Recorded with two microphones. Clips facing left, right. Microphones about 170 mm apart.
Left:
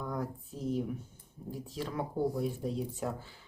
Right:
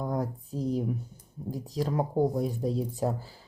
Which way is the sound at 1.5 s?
40° right (ahead or behind).